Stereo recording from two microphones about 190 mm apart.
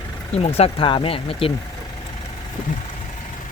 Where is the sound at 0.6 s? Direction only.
25° left (ahead or behind).